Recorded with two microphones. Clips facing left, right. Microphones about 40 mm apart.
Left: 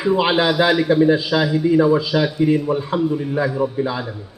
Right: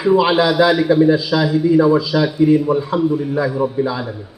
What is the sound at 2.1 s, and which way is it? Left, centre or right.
A man's voice, centre.